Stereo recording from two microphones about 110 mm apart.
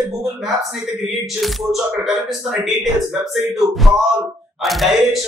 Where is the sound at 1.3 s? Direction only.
Centre (ahead or behind).